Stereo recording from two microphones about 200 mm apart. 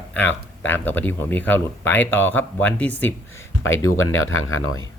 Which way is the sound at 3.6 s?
80° left.